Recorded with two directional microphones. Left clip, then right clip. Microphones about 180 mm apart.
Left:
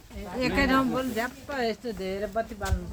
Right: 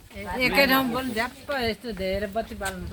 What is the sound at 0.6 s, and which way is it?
Speech, 60° right (ahead or behind).